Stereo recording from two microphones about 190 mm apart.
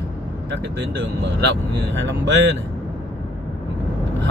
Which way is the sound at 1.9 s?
70° right (ahead or behind).